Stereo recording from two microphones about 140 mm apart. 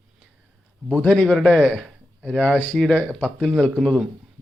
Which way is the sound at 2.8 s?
5° left (ahead or behind).